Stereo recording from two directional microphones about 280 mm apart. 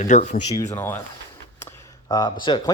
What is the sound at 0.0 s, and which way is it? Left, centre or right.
Speech, left.